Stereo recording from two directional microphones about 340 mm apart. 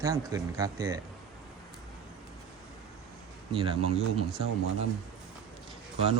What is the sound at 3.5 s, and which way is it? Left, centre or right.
Speech, centre.